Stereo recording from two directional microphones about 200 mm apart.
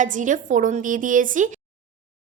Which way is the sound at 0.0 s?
40° right (ahead or behind).